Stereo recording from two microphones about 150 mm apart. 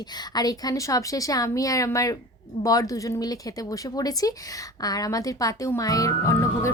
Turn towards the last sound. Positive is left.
turn(degrees=20)  # may be behind; listen again after turning